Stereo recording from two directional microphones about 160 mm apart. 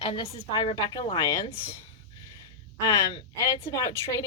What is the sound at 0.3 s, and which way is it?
A woman's voice, 40° left (ahead or behind).